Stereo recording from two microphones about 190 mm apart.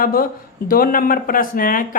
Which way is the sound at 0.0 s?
50° left (ahead or behind).